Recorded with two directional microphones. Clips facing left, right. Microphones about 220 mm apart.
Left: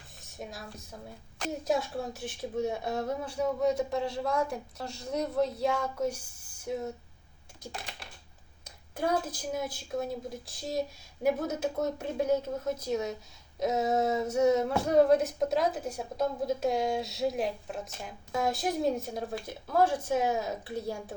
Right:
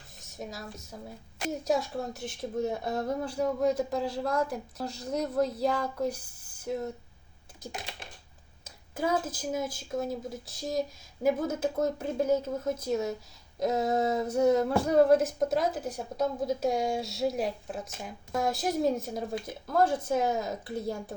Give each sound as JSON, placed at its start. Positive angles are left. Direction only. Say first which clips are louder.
{"t": 0.3, "sound": "speech", "louder": "right 2 dB", "side_deg": 0}
{"t": 7.7, "sound": "typing", "louder": "right 2 dB", "side_deg": -20}
{"t": 8.6, "sound": "speech", "louder": "right 1 dB", "side_deg": -5}